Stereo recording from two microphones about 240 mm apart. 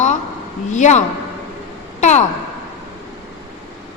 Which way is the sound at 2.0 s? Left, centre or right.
Left.